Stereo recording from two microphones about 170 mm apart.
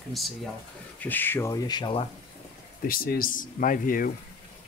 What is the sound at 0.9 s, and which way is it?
Speech, 10° left (ahead or behind).